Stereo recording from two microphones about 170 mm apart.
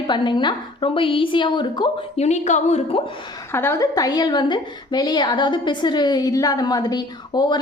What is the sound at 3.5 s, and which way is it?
A woman's voice, 15° left (ahead or behind).